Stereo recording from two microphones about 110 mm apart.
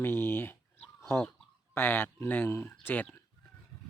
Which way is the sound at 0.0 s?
20° left (ahead or behind).